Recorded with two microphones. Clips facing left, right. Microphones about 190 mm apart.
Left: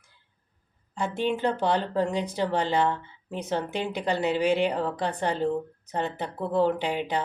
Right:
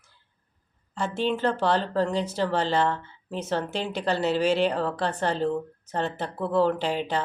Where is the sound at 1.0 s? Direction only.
15° left (ahead or behind).